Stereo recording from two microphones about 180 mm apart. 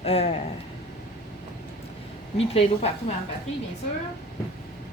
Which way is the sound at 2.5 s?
35° left (ahead or behind).